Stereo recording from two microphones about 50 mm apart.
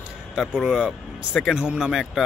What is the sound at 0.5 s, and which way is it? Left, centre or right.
Speech, centre.